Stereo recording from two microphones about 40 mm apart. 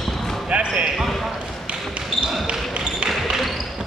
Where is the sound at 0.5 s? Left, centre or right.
Right.